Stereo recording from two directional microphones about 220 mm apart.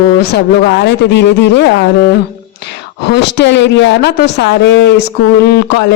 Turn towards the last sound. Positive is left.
turn(degrees=50)  # may be behind; listen again after turning